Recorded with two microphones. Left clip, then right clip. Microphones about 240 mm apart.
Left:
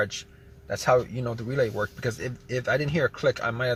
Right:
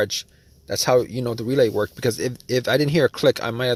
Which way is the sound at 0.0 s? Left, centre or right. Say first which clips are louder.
Right 5 dB; right.